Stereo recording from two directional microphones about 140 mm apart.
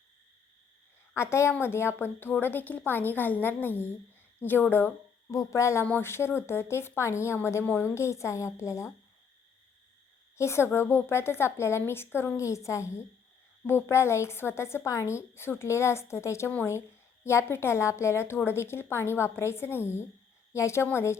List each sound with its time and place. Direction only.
1.1 s a woman's voice: 20° left (ahead or behind)
10.3 s a woman's voice: 20° left (ahead or behind)